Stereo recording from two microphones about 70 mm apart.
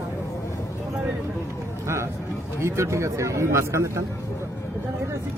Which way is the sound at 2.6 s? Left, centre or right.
Right.